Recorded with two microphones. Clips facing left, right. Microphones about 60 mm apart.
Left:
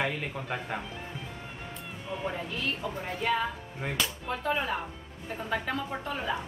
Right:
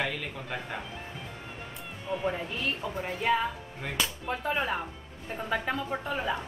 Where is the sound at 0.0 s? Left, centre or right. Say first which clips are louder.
Left 1 dB; left.